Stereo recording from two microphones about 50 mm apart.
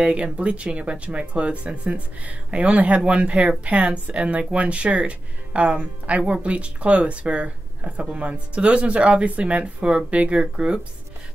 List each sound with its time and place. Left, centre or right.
0.0 s speech: right